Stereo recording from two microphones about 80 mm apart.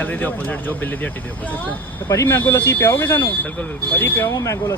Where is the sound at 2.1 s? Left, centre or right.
Left.